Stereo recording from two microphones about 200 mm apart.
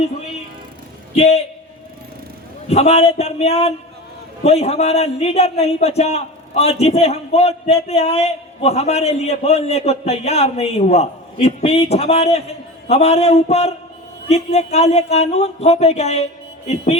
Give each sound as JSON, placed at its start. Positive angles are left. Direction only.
{"t": 1.1, "sound": "a man's voice", "side_deg": 30}
{"t": 2.6, "sound": "a man's voice", "side_deg": 30}